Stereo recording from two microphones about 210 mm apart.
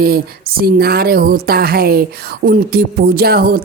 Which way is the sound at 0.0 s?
45° right (ahead or behind).